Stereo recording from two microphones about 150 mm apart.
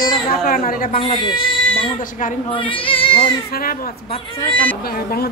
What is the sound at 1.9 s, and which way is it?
Speech, 65° left (ahead or behind).